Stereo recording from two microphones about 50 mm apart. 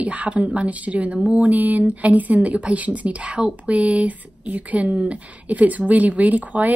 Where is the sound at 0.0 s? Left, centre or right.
Right.